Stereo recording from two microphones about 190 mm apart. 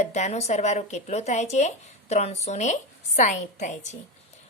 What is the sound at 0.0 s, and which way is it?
A woman's voice, 35° left (ahead or behind).